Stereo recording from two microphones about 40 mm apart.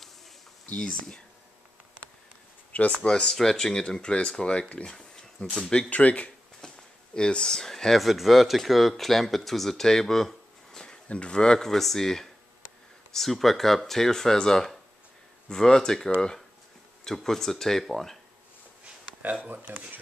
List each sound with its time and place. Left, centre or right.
0.7 s speech: left
3.0 s speech: left
4.8 s a sound: centre
5.6 s speech: left
5.9 s speech: left
6.6 s a sound: centre
7.2 s speech: left
11.1 s speech: left; by 18.1 s centre
19.7 s speech: right